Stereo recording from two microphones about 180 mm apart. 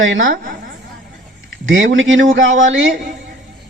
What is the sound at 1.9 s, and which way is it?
Speech, 90° right.